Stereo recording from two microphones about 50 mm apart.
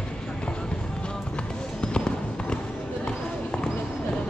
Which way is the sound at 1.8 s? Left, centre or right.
Centre.